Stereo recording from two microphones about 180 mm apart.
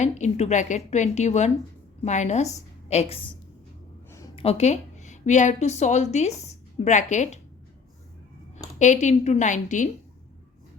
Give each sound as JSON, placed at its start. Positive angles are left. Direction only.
{"t": 0.0, "sound": "speech", "side_deg": 40}
{"t": 4.4, "sound": "a woman's voice", "side_deg": 35}
{"t": 8.5, "sound": "speech", "side_deg": 40}